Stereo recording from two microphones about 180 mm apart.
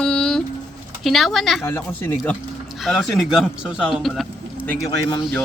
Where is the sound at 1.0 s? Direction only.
Centre (ahead or behind).